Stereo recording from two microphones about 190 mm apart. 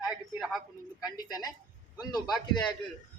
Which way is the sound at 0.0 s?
Centre (ahead or behind).